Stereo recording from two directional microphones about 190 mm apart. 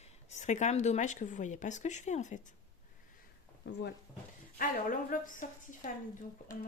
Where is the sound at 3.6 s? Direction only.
65° left (ahead or behind).